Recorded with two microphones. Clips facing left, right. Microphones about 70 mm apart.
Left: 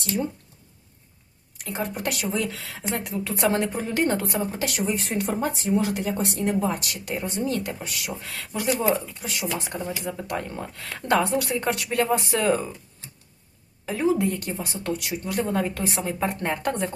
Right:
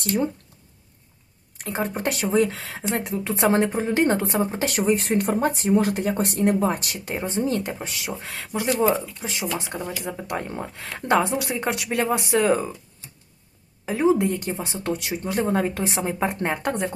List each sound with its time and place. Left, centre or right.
1.6 s speech: right
6.9 s a woman's voice: right
13.8 s a woman's voice: right